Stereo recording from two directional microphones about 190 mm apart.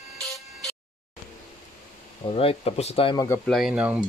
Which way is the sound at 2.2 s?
30° left (ahead or behind).